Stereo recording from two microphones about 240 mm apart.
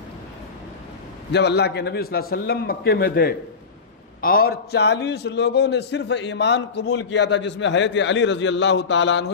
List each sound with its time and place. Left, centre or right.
1.3 s a man's voice: left